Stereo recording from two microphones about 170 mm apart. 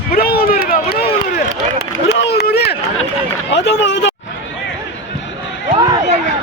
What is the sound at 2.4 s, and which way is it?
Run, 70° left (ahead or behind).